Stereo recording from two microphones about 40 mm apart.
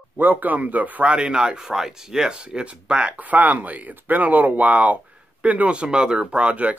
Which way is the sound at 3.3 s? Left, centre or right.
Right.